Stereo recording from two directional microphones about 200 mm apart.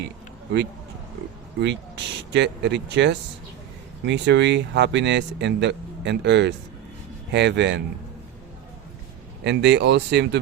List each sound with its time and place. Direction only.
1.6 s speech: 60° right (ahead or behind)
9.4 s speech: 60° right (ahead or behind)